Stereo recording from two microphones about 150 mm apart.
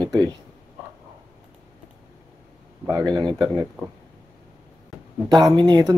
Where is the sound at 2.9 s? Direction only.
25° right (ahead or behind).